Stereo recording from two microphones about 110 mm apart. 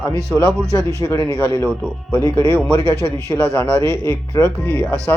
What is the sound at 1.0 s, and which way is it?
Speech, 25° left (ahead or behind).